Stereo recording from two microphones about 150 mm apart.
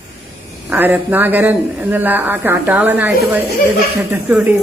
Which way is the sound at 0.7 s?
10° right (ahead or behind).